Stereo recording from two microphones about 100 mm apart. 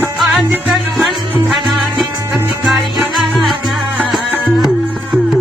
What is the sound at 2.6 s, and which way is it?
Music, centre (ahead or behind).